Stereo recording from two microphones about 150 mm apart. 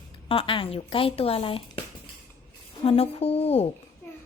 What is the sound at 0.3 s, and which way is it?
Speech, 35° left (ahead or behind).